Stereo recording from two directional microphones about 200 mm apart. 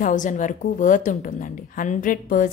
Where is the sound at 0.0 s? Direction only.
40° left (ahead or behind).